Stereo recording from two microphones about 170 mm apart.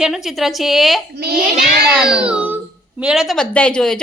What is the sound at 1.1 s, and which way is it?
Speech, 70° right (ahead or behind).